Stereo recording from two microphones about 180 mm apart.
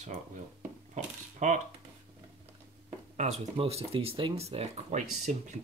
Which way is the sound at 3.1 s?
40° right (ahead or behind).